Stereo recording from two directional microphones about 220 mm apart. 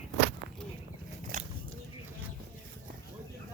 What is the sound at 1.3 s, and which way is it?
Biting, 35° right (ahead or behind).